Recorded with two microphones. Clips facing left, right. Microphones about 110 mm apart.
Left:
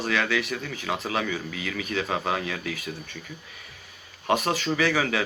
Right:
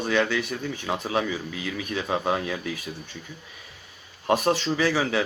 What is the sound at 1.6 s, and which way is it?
Speech, 20° right (ahead or behind).